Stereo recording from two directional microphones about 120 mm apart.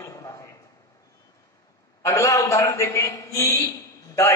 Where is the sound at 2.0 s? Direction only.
25° left (ahead or behind).